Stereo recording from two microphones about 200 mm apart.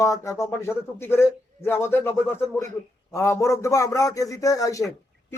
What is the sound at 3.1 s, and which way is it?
A man's voice, 15° left (ahead or behind).